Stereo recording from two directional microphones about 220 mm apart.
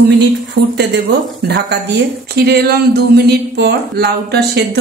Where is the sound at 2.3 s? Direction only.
45° right (ahead or behind).